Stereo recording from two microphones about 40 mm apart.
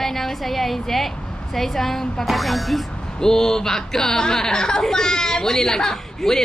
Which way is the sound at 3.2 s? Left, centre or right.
Centre.